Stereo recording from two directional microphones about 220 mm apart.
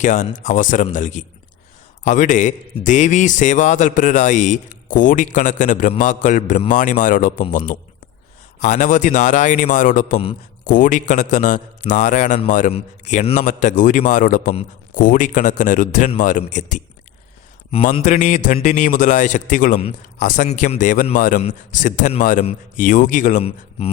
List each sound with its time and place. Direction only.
0.0 s a man's voice: 35° left (ahead or behind)
8.6 s a man's voice: 35° left (ahead or behind)